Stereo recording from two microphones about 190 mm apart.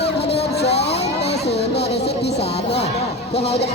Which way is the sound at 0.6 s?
60° left (ahead or behind).